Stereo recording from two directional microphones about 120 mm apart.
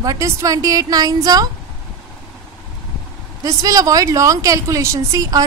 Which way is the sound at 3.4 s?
30° right (ahead or behind).